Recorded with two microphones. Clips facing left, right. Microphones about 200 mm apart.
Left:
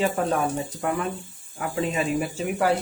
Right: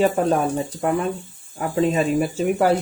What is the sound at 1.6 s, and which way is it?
Speech, 40° right (ahead or behind).